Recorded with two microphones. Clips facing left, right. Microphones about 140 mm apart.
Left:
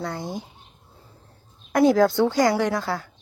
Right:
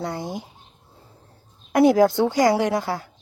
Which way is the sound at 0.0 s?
15° right (ahead or behind).